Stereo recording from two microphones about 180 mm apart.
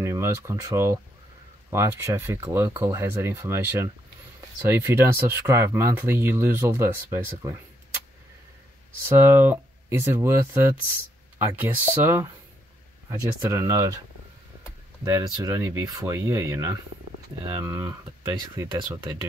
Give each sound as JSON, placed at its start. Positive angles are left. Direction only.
{"t": 0.0, "sound": "speech", "side_deg": -15}
{"t": 9.0, "sound": "speech", "side_deg": -15}
{"t": 15.0, "sound": "speech", "side_deg": -15}
{"t": 18.4, "sound": "speech", "side_deg": -25}